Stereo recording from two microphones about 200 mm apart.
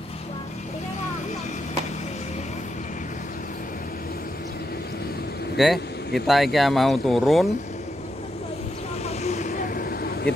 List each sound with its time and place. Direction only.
5.6 s speech: centre (ahead or behind)
9.0 s vehicle: 35° left (ahead or behind); by 10.3 s 50° left (ahead or behind)